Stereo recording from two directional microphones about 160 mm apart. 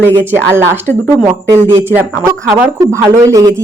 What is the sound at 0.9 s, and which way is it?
Speech, 10° left (ahead or behind).